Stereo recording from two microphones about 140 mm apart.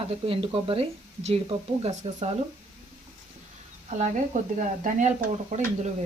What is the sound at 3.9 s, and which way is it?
Speech, 60° right (ahead or behind).